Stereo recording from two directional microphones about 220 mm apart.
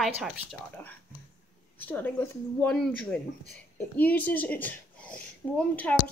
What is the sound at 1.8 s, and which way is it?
A woman's voice, 10° left (ahead or behind).